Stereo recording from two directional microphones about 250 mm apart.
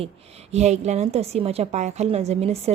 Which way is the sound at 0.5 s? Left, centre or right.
Right.